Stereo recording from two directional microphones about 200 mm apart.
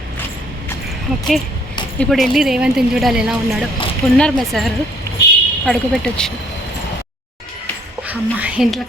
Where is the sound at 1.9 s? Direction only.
5° left (ahead or behind).